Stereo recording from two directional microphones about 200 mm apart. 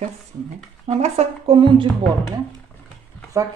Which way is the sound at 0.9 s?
30° right (ahead or behind).